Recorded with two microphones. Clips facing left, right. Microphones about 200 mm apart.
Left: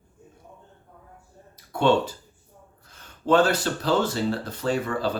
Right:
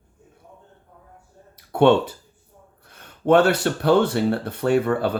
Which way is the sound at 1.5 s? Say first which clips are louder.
Right 5 dB; 65° right (ahead or behind).